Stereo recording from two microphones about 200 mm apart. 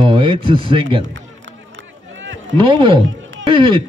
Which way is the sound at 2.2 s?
70° right (ahead or behind).